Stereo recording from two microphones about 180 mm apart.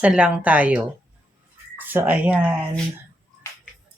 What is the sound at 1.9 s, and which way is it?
Speech, 10° right (ahead or behind).